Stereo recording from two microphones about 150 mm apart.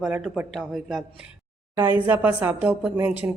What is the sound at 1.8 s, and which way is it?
A woman's voice, 15° right (ahead or behind).